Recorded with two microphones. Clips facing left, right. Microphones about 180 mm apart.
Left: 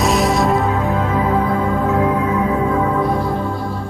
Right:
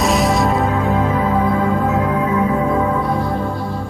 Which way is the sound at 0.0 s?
Centre (ahead or behind).